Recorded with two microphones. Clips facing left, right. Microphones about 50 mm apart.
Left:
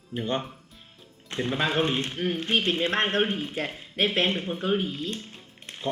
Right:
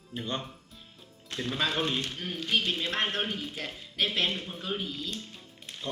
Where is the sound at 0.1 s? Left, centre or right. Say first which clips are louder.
Left 6 dB; left.